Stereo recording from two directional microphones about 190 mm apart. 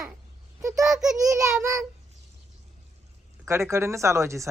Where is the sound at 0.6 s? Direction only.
15° right (ahead or behind).